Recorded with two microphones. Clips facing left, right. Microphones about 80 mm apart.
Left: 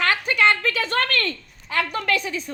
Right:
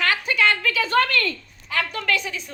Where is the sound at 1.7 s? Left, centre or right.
Left.